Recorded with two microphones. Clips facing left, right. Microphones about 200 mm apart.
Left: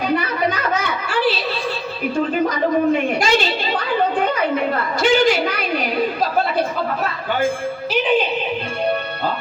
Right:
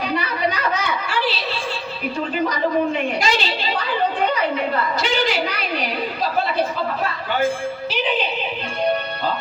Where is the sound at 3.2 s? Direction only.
50° left (ahead or behind).